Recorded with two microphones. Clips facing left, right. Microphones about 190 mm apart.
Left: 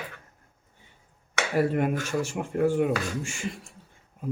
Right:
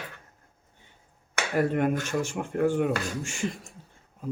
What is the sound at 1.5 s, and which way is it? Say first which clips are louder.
Speech: even; 5° left (ahead or behind).